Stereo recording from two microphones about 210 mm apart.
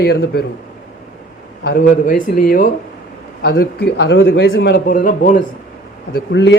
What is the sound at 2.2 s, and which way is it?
A man's voice, 40° left (ahead or behind).